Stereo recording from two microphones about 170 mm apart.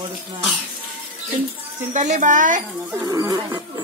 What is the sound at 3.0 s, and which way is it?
Speech, 20° right (ahead or behind).